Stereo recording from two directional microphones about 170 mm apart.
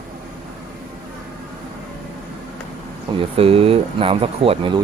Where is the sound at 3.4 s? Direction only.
35° right (ahead or behind).